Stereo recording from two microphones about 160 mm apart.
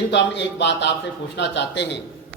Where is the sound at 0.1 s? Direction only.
90° left.